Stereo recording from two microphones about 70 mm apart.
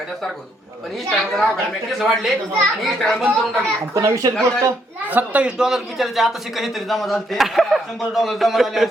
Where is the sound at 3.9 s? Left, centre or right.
Right.